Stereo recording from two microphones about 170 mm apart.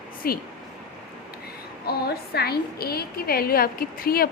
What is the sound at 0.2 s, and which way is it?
Speech, 60° left (ahead or behind).